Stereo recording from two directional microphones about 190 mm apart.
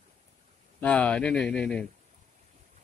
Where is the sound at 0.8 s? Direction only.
5° left (ahead or behind).